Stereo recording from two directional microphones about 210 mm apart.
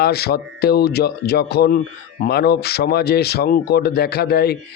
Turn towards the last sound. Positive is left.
turn(degrees=50)  # may be behind; listen again after turning